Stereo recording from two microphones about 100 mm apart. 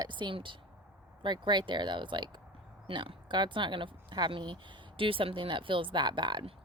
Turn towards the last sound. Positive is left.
turn(degrees=-50)  # may be behind; listen again after turning